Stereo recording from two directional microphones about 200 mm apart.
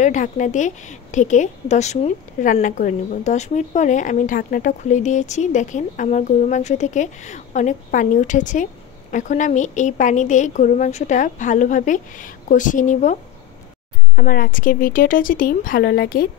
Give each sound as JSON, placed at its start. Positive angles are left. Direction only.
{"t": 0.0, "sound": "a woman's voice", "side_deg": 40}